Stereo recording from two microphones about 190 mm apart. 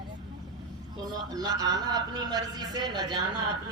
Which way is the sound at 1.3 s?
20° right (ahead or behind).